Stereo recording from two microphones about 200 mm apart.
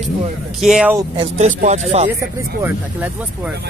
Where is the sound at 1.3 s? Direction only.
35° right (ahead or behind).